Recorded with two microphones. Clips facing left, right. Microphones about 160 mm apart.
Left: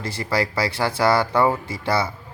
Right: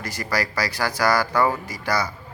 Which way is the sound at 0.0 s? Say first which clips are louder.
Left 3 dB; 25° left (ahead or behind).